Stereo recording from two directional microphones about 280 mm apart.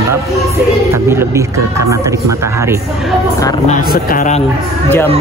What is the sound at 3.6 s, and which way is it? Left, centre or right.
Speech, left.